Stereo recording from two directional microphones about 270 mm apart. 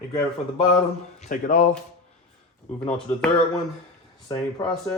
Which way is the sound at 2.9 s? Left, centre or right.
Centre.